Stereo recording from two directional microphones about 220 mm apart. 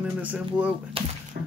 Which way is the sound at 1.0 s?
25° right (ahead or behind).